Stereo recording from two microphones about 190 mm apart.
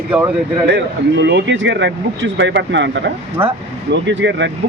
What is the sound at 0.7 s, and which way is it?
Speech, 65° right (ahead or behind).